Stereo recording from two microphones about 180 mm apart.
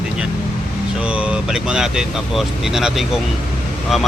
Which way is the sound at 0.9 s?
5° right (ahead or behind).